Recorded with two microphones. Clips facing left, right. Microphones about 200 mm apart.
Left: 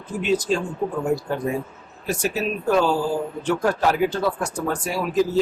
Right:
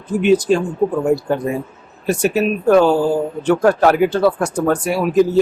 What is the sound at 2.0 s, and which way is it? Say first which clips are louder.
Speech: right 8 dB; 65° right (ahead or behind).